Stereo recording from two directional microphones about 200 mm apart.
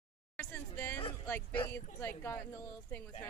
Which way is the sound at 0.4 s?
10° left (ahead or behind).